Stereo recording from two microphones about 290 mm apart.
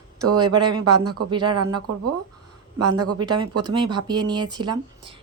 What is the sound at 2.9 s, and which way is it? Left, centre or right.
Speech, right.